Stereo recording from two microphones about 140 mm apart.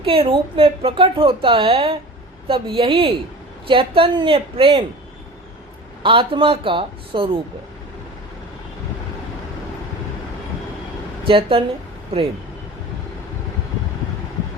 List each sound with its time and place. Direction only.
0.0 s a woman's voice: 40° right (ahead or behind)
6.0 s a woman's voice: 40° right (ahead or behind)
11.2 s speech: 40° right (ahead or behind)